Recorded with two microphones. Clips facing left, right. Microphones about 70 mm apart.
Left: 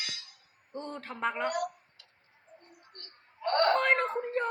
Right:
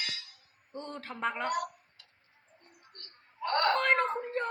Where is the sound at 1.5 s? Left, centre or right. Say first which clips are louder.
Even; right.